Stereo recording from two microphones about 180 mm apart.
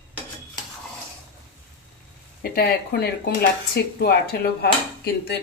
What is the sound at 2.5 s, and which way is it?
Speech, 60° left (ahead or behind).